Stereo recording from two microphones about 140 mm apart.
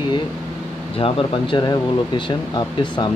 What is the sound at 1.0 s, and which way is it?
Speech, 40° left (ahead or behind).